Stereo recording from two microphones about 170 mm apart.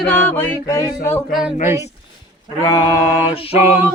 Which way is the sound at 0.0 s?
10° left (ahead or behind).